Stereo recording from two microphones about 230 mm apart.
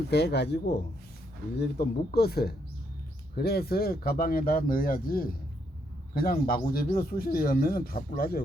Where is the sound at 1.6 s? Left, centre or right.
Left.